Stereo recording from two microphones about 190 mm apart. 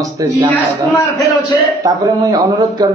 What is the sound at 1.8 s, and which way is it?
A man's voice, 20° right (ahead or behind).